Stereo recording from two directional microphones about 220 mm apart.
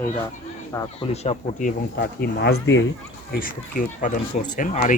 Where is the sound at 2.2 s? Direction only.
50° left (ahead or behind).